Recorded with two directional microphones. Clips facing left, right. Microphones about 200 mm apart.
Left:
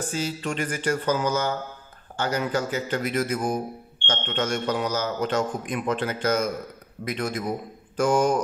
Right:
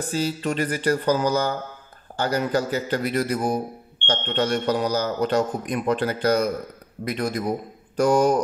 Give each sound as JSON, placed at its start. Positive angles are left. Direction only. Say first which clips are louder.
{"t": 0.1, "sound": "speech", "louder": "right 7 dB", "side_deg": -35}